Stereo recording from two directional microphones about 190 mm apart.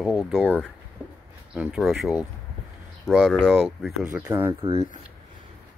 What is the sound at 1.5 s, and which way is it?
Speech, 5° right (ahead or behind).